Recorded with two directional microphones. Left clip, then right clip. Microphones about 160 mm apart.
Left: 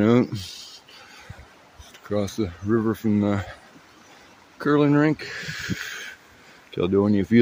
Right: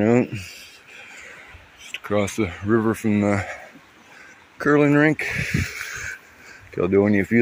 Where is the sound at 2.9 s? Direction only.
10° left (ahead or behind).